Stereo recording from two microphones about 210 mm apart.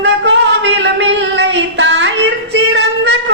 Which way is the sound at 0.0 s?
60° right (ahead or behind).